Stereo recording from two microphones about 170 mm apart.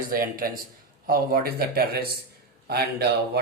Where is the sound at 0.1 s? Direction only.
60° right (ahead or behind).